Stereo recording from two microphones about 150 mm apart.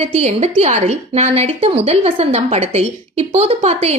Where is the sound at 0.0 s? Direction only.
45° right (ahead or behind).